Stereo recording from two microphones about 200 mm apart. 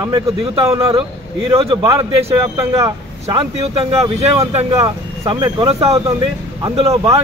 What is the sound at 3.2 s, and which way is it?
Speech, 30° right (ahead or behind).